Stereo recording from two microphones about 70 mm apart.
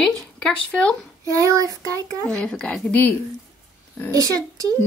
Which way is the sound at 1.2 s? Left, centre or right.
Right.